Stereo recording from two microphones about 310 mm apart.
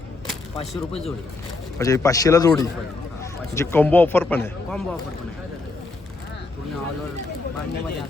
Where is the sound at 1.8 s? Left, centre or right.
Centre.